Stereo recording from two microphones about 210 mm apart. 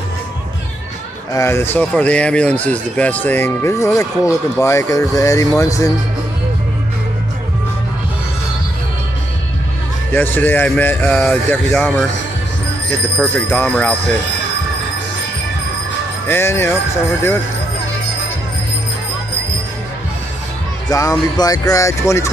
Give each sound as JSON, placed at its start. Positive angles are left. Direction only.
{"t": 1.3, "sound": "speech", "side_deg": 10}
{"t": 10.1, "sound": "speech", "side_deg": 10}
{"t": 13.2, "sound": "speech", "side_deg": 5}
{"t": 16.3, "sound": "speech", "side_deg": 10}
{"t": 20.9, "sound": "speech", "side_deg": 15}